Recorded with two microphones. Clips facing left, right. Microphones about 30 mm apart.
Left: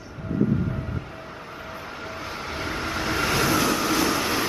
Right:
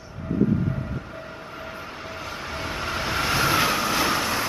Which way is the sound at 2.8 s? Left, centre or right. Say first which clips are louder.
Even; centre.